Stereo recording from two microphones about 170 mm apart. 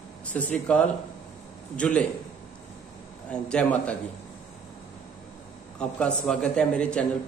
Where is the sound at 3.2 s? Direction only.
5° left (ahead or behind).